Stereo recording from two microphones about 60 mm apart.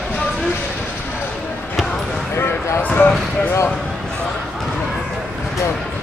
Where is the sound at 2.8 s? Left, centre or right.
Left.